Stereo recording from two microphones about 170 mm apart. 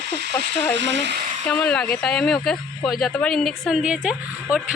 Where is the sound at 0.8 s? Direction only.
90° right.